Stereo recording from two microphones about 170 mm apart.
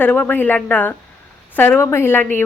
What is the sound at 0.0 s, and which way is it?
A woman's voice, 10° left (ahead or behind).